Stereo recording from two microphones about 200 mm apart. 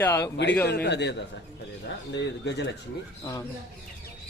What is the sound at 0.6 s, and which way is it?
A man's voice, 60° left (ahead or behind).